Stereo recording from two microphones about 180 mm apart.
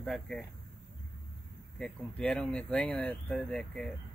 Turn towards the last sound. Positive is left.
turn(degrees=5)  # may be behind; listen again after turning